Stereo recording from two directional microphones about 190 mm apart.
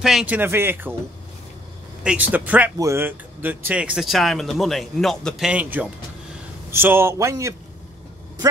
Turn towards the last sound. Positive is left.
turn(degrees=-15)  # may be behind; listen again after turning